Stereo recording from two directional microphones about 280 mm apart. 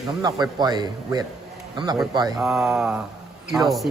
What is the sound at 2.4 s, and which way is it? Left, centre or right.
Speech, centre.